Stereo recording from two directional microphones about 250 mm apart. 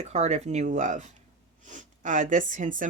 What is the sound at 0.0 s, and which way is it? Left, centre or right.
Speech, right.